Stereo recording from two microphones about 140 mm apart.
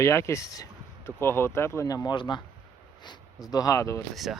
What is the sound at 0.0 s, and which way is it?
Speech, 20° left (ahead or behind).